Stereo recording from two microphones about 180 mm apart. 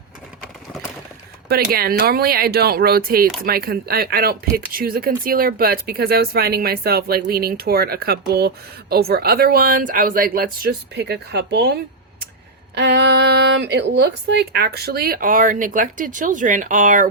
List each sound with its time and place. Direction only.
1.7 s speech: 55° right (ahead or behind)